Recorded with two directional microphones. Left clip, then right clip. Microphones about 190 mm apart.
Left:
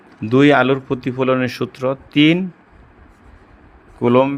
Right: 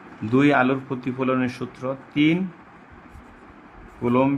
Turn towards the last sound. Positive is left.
turn(degrees=45)  # may be behind; listen again after turning